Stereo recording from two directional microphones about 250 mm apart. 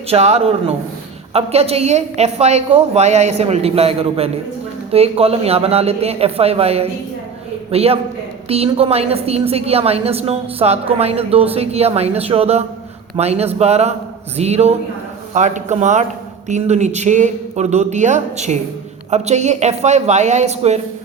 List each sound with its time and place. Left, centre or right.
0.1 s a woman's voice: right